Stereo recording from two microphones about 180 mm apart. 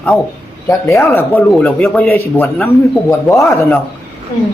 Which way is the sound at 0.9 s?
15° left (ahead or behind).